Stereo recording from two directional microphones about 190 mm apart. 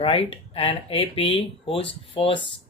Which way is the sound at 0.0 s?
30° left (ahead or behind).